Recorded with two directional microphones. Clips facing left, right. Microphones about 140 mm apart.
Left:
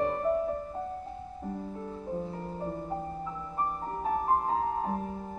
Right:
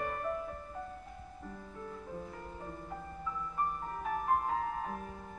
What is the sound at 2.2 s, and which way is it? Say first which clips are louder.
Music: left 9 dB; 30° left (ahead or behind).